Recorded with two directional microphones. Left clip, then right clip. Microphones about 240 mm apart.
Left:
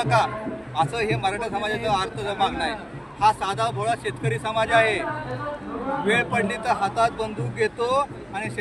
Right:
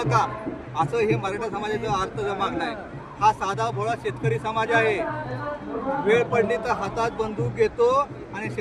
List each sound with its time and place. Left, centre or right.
0.0 s a man's voice: centre
6.1 s a man's voice: centre